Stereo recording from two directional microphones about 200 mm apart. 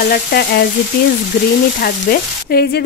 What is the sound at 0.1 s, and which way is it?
Frying, 50° left (ahead or behind).